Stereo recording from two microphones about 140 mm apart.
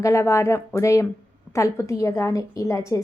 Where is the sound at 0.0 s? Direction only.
20° left (ahead or behind).